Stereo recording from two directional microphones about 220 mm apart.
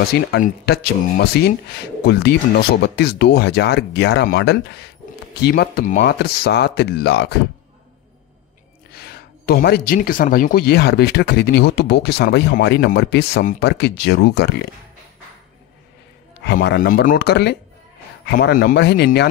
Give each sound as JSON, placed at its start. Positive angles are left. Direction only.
{"t": 0.1, "sound": "speech", "side_deg": 45}
{"t": 8.9, "sound": "speech", "side_deg": 45}
{"t": 16.3, "sound": "speech", "side_deg": 50}